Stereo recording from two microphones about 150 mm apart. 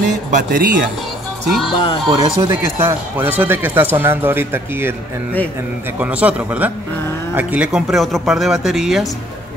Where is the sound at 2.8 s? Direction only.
15° right (ahead or behind).